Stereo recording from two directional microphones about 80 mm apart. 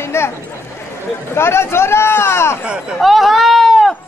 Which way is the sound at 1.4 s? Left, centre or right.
Left.